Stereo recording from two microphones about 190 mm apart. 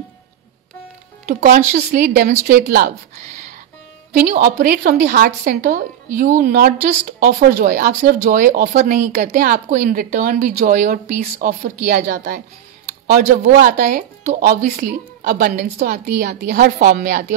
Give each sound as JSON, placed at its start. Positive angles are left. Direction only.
{"t": 1.2, "sound": "speech", "side_deg": -50}
{"t": 4.1, "sound": "speech", "side_deg": -40}